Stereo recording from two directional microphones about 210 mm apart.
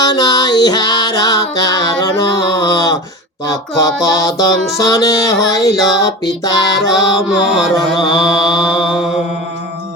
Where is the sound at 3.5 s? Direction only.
15° left (ahead or behind).